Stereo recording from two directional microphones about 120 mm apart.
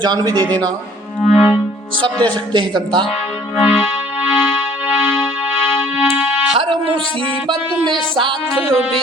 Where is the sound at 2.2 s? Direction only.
40° right (ahead or behind).